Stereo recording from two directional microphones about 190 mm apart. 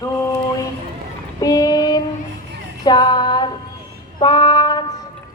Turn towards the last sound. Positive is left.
turn(degrees=20)  # may be behind; listen again after turning